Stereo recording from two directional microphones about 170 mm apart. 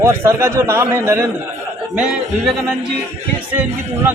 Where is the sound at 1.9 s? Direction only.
5° right (ahead or behind).